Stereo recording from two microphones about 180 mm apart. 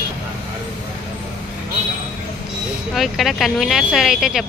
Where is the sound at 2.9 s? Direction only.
Centre (ahead or behind).